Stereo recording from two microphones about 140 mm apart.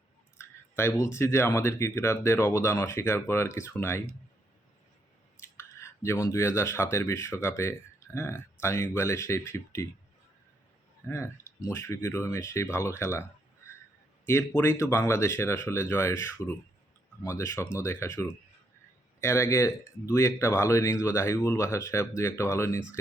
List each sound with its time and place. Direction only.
0.3 s speech: 20° left (ahead or behind)
5.4 s speech: 20° left (ahead or behind)
11.0 s speech: 20° left (ahead or behind)
14.3 s speech: 15° left (ahead or behind)